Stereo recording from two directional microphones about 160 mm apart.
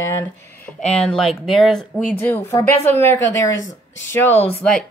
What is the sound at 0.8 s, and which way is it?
Speech, 5° left (ahead or behind).